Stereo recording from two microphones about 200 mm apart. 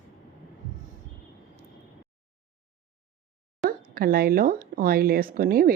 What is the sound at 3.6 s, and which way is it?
Speech, 50° right (ahead or behind).